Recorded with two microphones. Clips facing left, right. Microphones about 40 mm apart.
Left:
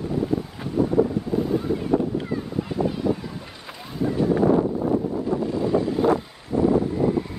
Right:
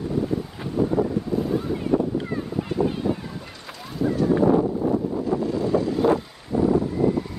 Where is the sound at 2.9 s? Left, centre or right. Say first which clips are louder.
Left 1 dB; right.